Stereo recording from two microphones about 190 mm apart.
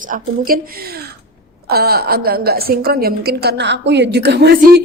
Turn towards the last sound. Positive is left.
turn(degrees=-60)  # may be behind; listen again after turning